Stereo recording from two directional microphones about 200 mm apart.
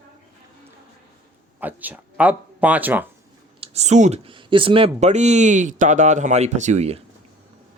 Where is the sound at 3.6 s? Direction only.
35° right (ahead or behind).